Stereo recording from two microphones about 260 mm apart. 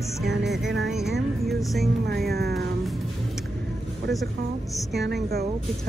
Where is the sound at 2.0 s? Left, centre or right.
Right.